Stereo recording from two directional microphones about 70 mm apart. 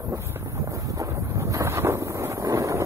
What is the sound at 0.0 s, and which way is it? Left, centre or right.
Wind noise, right.